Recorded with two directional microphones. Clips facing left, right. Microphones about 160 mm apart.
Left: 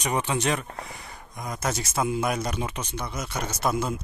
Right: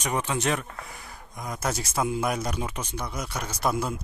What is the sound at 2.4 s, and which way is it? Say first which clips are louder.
Speech: left 1 dB; 10° right (ahead or behind).